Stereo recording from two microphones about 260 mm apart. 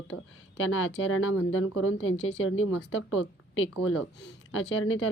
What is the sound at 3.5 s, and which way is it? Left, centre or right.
A woman's voice, left.